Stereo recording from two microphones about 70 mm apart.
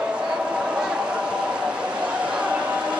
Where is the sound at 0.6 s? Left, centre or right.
Centre.